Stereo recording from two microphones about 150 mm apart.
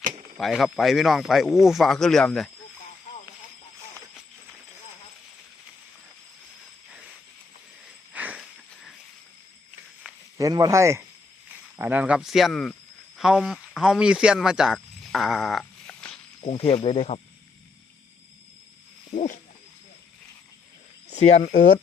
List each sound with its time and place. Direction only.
0.3 s speech: centre (ahead or behind)
8.1 s a sound: 10° right (ahead or behind)
10.3 s speech: 25° right (ahead or behind); by 16.1 s 5° left (ahead or behind)
16.4 s speech: 40° left (ahead or behind)
19.1 s a sound: 55° left (ahead or behind)
21.1 s speech: 50° left (ahead or behind)